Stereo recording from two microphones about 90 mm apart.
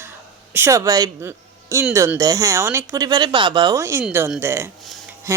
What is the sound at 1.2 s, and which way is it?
Speech, 30° right (ahead or behind).